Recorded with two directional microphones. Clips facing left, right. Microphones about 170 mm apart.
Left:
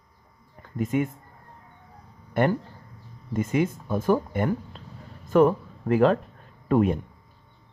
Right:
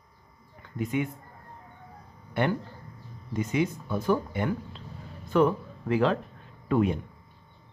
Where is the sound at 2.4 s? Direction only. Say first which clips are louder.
Left 4 dB; 50° left (ahead or behind).